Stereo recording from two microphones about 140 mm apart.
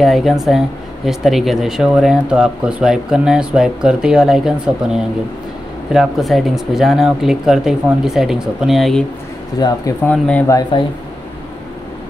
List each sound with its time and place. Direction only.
0.0 s speech: centre (ahead or behind)
9.6 s speech: 25° left (ahead or behind)
10.0 s speech: 10° left (ahead or behind)
10.7 s speech: 35° left (ahead or behind)